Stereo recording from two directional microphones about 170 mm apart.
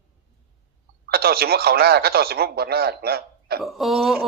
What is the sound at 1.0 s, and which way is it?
Speech, 65° right (ahead or behind).